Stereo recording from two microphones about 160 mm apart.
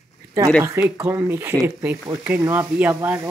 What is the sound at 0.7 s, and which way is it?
Speech, 10° right (ahead or behind).